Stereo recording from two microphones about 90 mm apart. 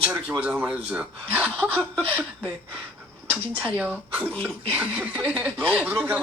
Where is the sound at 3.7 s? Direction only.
15° right (ahead or behind).